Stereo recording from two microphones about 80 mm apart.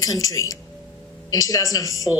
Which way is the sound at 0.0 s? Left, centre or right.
Left.